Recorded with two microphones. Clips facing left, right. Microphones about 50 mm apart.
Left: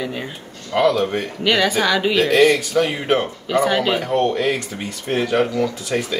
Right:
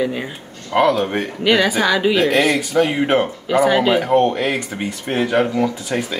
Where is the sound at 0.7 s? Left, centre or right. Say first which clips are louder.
Right 1 dB; right.